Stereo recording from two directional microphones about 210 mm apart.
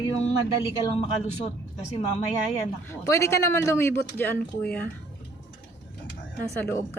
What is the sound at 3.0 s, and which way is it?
A woman's voice, 15° left (ahead or behind).